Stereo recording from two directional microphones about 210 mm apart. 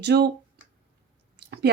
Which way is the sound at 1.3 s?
50° right (ahead or behind).